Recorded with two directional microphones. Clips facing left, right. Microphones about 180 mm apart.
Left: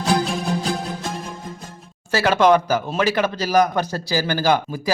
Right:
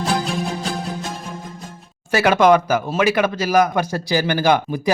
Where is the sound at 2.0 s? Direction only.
15° right (ahead or behind).